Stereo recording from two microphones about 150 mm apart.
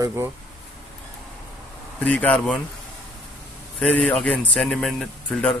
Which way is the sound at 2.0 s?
10° left (ahead or behind).